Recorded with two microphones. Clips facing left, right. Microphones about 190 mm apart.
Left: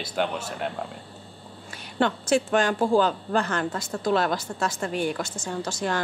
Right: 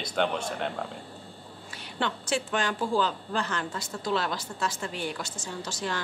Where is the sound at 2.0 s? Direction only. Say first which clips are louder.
Left 7 dB; 45° left (ahead or behind).